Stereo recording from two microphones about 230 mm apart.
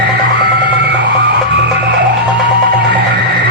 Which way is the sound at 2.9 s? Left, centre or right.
Right.